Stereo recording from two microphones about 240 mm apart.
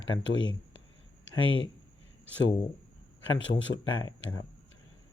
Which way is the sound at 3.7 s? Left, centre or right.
Left.